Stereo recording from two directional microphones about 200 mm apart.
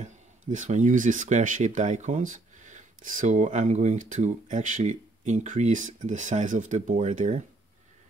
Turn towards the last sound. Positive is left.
turn(degrees=-35)  # may be behind; listen again after turning